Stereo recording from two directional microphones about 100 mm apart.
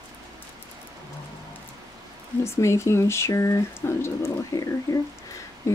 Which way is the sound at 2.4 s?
30° left (ahead or behind).